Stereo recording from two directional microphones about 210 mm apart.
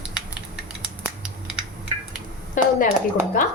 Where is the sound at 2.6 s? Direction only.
40° left (ahead or behind).